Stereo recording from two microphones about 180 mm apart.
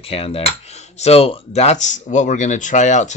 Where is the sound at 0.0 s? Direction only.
35° left (ahead or behind).